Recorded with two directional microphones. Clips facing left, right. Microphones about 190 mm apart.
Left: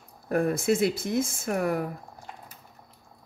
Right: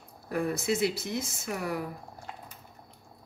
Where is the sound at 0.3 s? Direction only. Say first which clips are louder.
Left 5 dB; 50° left (ahead or behind).